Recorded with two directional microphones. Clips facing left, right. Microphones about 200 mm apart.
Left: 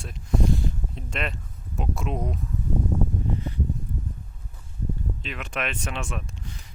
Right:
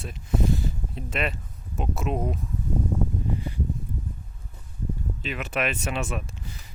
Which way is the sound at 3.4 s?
10° right (ahead or behind).